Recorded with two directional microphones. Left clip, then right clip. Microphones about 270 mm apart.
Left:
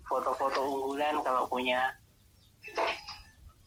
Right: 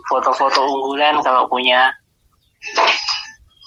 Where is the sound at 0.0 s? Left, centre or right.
Right.